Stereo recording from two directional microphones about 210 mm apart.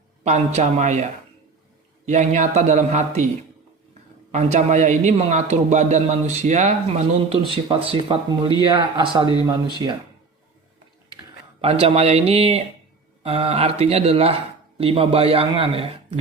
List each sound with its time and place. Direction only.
0.3 s a man's voice: 35° right (ahead or behind)
2.0 s a man's voice: 35° right (ahead or behind)
4.3 s a man's voice: 35° right (ahead or behind)
11.6 s speech: 25° right (ahead or behind)